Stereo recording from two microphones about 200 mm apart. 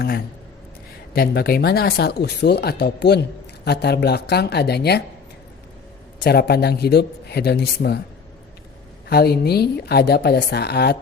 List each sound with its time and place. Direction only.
1.1 s speech: 50° left (ahead or behind)
6.1 s speech: 50° left (ahead or behind)
9.0 s speech: 50° left (ahead or behind)